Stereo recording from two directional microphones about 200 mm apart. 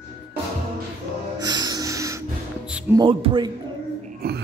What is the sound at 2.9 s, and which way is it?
Speech, 25° right (ahead or behind).